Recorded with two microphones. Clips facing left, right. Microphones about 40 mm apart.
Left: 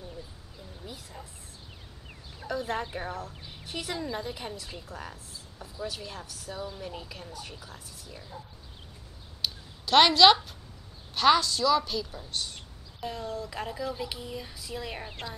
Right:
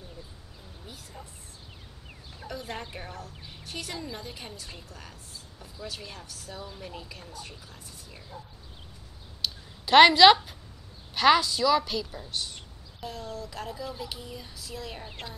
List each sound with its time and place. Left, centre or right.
1.1 s speech: centre
2.5 s speech: centre
3.6 s a woman's voice: centre
9.8 s a woman's voice: centre
13.0 s speech: centre
15.0 s a woman's voice: centre